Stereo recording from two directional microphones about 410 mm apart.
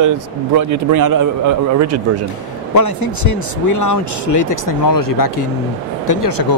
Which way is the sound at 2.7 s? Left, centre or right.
Left.